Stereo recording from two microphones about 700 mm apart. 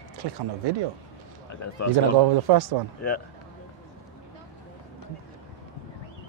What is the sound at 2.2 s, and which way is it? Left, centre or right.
Speech, right.